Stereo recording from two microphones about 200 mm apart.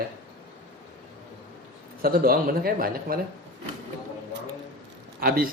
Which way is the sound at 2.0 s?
45° right (ahead or behind).